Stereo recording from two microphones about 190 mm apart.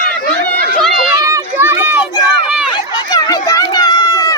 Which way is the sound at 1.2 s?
10° right (ahead or behind).